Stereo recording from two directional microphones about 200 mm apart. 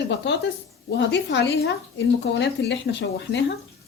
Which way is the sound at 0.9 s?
60° left (ahead or behind).